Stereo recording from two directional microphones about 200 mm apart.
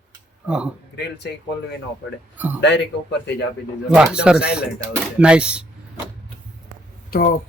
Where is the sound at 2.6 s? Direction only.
60° left (ahead or behind).